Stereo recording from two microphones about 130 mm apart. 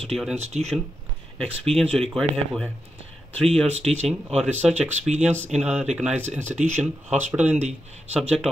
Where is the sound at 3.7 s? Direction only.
55° right (ahead or behind).